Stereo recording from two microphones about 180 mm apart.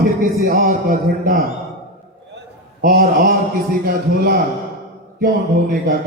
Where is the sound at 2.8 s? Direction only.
55° right (ahead or behind).